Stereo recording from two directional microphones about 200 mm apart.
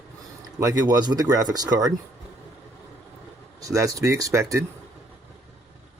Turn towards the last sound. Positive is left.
turn(degrees=-15)  # may be behind; listen again after turning